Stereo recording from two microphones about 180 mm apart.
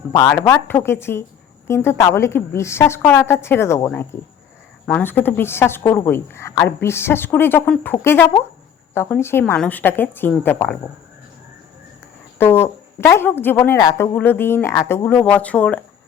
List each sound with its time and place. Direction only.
0.1 s a woman's voice: 15° left (ahead or behind)
12.4 s a woman's voice: 15° left (ahead or behind)